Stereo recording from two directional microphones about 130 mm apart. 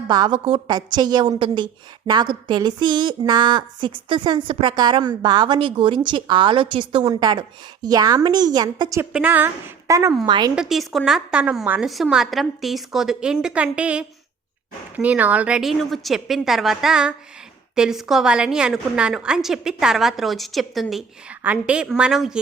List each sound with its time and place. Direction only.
0.1 s a woman's voice: 35° right (ahead or behind)
0.3 s a woman's voice: 45° right (ahead or behind)
0.7 s a woman's voice: 30° right (ahead or behind)
9.1 s a woman's voice: 15° right (ahead or behind)
10.2 s a woman's voice: 35° right (ahead or behind)
10.5 s a woman's voice: 5° right (ahead or behind)
20.9 s a woman's voice: 10° right (ahead or behind)